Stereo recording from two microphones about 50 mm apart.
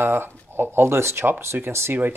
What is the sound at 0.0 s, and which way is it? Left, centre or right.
Speech, right.